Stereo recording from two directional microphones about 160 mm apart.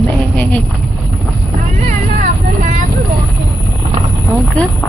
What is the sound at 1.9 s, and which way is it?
Vehicle, 55° right (ahead or behind).